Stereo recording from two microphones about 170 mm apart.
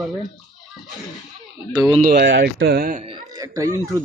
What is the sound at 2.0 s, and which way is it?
Speech, 65° right (ahead or behind).